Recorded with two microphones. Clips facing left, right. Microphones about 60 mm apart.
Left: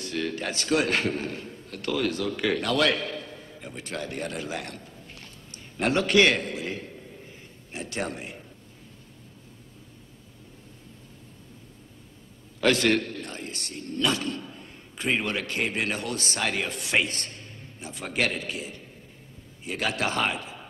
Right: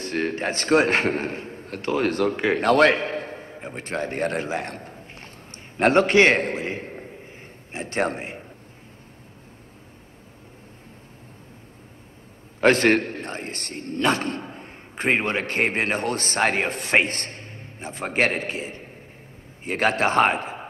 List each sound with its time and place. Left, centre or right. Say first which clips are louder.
0.0 s a man's voice: right 5 dB; right
12.5 s a man's voice: right 5 dB; right